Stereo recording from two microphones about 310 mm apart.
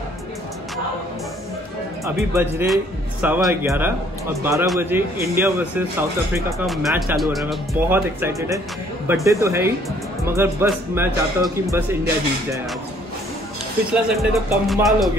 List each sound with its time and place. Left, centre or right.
2.0 s speech: centre
13.9 s speech: centre